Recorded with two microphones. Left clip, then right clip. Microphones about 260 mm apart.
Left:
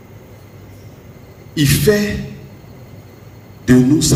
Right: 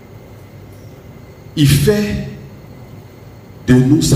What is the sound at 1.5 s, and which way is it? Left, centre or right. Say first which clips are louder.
Speech: even; left.